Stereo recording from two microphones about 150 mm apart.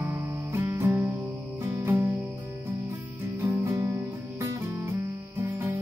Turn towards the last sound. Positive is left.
turn(degrees=-15)  # may be behind; listen again after turning